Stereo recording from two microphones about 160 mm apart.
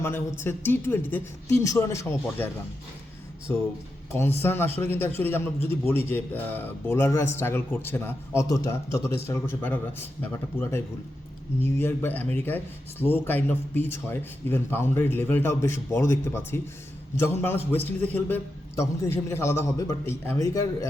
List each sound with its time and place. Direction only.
0.0 s speech: 15° left (ahead or behind)
3.5 s speech: 10° left (ahead or behind)